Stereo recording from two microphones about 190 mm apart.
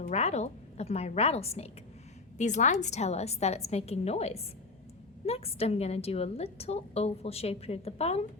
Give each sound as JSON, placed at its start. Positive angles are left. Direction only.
{"t": 0.1, "sound": "a woman's voice", "side_deg": 35}